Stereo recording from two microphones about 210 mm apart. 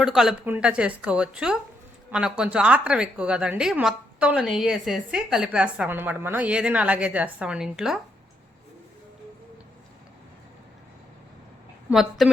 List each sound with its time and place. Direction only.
0.0 s a woman's voice: centre (ahead or behind)
11.9 s a woman's voice: centre (ahead or behind)